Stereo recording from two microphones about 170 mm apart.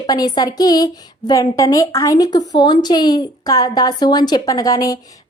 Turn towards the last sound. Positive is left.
turn(degrees=20)  # may be behind; listen again after turning